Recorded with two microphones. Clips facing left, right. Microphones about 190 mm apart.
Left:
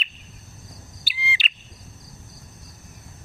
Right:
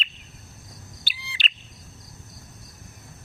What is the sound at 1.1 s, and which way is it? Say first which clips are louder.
Bird: left 6 dB; 5° left (ahead or behind).